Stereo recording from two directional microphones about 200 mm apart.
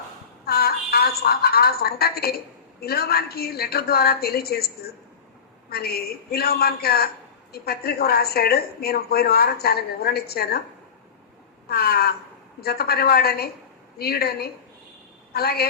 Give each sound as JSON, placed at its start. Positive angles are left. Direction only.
{"t": 0.4, "sound": "a sound", "side_deg": 50}
{"t": 2.8, "sound": "a woman's voice", "side_deg": 50}
{"t": 11.7, "sound": "a woman's voice", "side_deg": 50}